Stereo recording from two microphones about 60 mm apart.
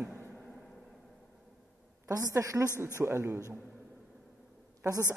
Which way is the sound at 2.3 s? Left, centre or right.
Right.